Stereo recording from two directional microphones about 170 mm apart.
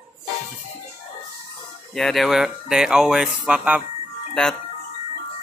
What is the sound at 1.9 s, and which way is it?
Speech, centre (ahead or behind).